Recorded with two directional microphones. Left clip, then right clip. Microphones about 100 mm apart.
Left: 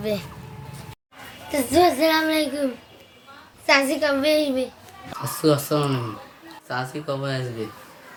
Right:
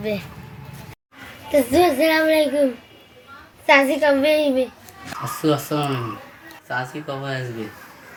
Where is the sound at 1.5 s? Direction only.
40° left (ahead or behind).